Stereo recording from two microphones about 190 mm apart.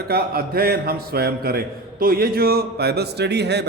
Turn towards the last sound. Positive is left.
turn(degrees=-60)  # may be behind; listen again after turning